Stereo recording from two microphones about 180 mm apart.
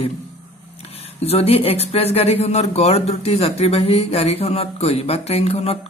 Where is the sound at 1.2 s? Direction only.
35° left (ahead or behind).